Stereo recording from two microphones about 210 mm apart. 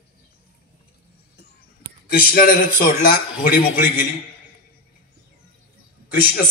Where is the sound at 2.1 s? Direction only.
45° left (ahead or behind).